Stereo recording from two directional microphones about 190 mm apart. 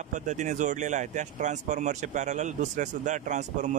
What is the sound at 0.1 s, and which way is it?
Speech, 40° right (ahead or behind).